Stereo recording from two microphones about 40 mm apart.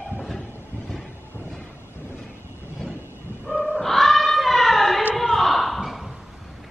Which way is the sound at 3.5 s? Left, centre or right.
Centre.